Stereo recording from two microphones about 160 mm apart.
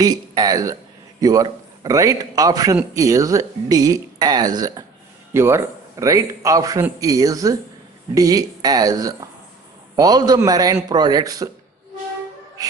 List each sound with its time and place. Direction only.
0.0 s a man's voice: 25° right (ahead or behind)